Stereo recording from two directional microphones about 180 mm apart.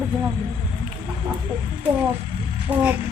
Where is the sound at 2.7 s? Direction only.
10° right (ahead or behind).